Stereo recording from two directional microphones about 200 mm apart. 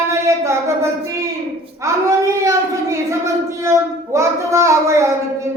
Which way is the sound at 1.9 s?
15° right (ahead or behind).